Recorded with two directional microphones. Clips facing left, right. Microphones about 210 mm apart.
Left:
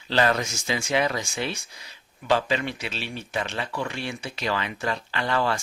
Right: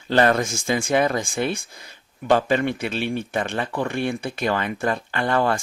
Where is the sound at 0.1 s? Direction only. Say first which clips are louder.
Right 5 dB; 50° right (ahead or behind).